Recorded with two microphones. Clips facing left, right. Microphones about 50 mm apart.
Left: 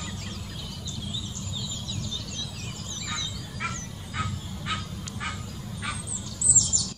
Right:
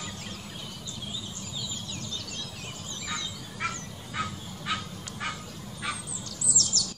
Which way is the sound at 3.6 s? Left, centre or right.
Centre.